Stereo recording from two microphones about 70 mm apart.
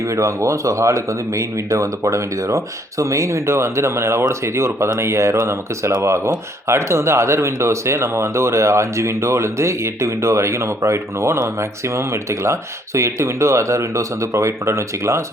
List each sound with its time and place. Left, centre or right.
0.0 s speech: right